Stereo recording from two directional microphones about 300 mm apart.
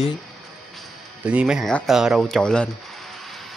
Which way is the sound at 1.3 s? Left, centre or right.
Centre.